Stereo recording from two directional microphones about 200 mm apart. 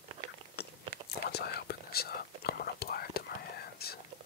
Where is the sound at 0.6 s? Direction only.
55° left (ahead or behind).